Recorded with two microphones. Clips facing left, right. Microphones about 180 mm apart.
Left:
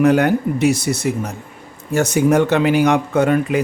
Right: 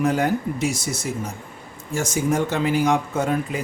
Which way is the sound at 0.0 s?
70° left (ahead or behind).